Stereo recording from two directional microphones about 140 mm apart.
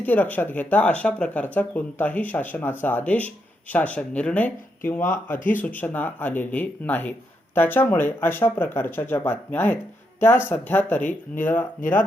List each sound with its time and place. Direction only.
0.0 s speech: 10° left (ahead or behind)
11.8 s speech: 70° left (ahead or behind)